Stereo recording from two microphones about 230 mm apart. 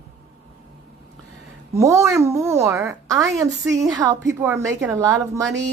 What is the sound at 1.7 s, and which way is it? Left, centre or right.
A woman's voice, centre.